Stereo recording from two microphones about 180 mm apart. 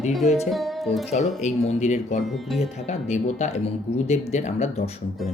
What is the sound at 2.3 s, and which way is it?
Speech, centre (ahead or behind).